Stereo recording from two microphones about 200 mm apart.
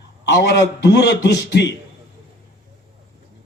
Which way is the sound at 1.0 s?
55° left (ahead or behind).